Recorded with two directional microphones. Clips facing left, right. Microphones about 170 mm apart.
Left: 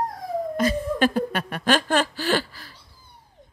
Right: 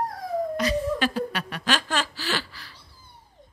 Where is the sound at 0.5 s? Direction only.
50° left (ahead or behind).